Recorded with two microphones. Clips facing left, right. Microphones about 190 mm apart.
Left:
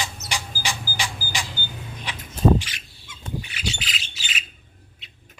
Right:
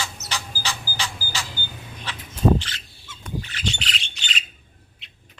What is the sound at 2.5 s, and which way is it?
Rodents, 10° left (ahead or behind).